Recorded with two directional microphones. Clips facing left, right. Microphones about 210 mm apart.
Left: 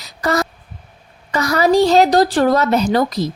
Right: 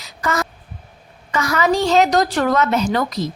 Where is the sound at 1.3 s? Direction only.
35° left (ahead or behind).